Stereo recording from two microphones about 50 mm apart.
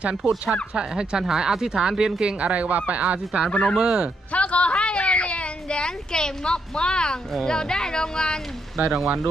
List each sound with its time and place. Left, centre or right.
0.4 s speech: centre
2.4 s speech: right
3.0 s speech: centre
3.5 s speech: left
3.8 s speech: centre
4.3 s a sound: left
7.4 s speech: centre
8.9 s speech: centre